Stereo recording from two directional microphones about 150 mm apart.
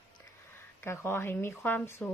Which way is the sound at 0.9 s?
15° left (ahead or behind).